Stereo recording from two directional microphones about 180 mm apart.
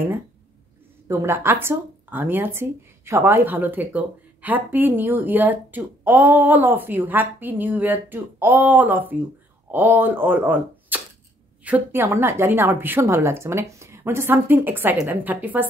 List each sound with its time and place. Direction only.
1.0 s speech: 15° right (ahead or behind)